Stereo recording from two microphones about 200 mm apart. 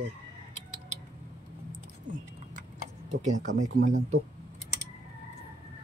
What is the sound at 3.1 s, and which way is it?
Speech, 35° right (ahead or behind).